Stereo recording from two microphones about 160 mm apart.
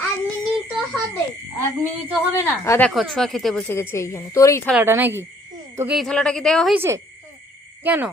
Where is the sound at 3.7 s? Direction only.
15° left (ahead or behind).